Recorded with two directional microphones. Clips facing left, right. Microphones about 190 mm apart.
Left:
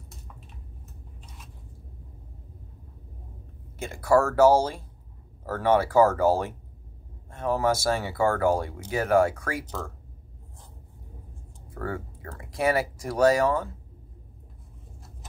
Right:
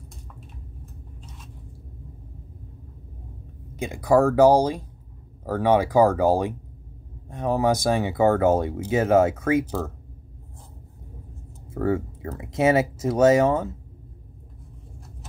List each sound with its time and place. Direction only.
3.7 s speech: 15° right (ahead or behind)
11.7 s speech: 25° right (ahead or behind)